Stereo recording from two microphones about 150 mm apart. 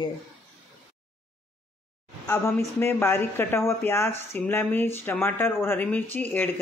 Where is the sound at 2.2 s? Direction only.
20° left (ahead or behind).